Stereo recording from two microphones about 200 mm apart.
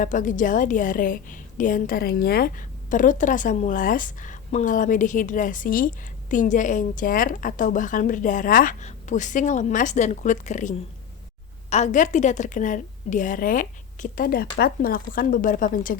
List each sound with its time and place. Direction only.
0.0 s a woman's voice: 40° left (ahead or behind)